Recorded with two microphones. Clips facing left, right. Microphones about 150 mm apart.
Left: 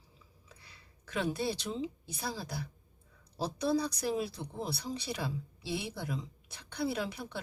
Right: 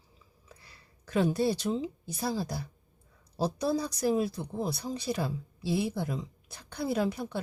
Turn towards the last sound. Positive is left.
turn(degrees=-45)  # may be behind; listen again after turning